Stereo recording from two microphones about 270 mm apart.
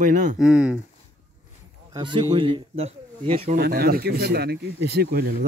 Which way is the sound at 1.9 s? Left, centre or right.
Centre.